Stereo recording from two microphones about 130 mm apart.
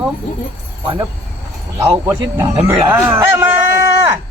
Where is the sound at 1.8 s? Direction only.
20° right (ahead or behind).